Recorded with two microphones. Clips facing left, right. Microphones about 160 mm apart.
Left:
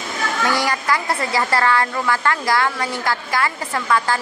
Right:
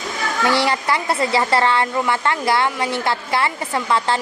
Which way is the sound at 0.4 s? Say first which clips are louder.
Right 3 dB; 25° right (ahead or behind).